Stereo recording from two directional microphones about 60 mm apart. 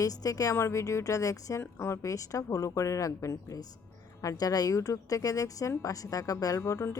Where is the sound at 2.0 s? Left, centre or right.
Left.